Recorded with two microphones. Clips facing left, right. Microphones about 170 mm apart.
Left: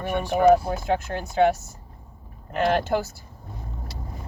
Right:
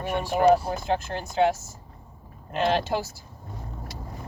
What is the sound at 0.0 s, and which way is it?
Speech, 55° left (ahead or behind).